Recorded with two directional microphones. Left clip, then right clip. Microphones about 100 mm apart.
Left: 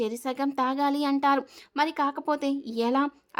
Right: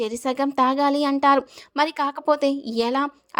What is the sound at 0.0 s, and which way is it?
A woman's voice, 50° right (ahead or behind).